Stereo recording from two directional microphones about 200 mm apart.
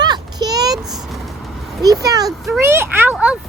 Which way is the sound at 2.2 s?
Centre (ahead or behind).